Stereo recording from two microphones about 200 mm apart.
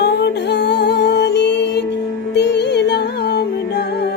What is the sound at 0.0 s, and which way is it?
Music, 55° left (ahead or behind).